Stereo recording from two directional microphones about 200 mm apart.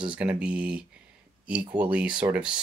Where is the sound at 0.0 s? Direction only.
5° right (ahead or behind).